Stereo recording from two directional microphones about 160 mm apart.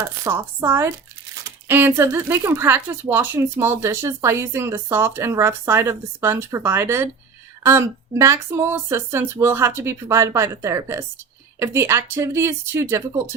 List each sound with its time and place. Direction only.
0.3 s speech: 15° right (ahead or behind)